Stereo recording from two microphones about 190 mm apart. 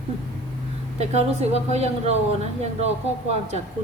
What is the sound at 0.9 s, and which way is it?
Speech, 35° right (ahead or behind).